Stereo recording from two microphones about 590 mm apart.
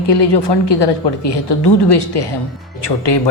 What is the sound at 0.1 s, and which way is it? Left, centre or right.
Speech, left.